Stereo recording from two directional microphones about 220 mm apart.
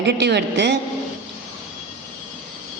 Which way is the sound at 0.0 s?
50° right (ahead or behind).